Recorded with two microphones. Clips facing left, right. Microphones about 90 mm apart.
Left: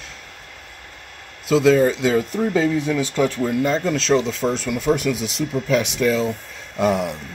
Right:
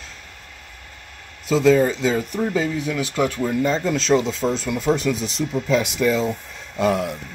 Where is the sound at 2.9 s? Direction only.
5° right (ahead or behind).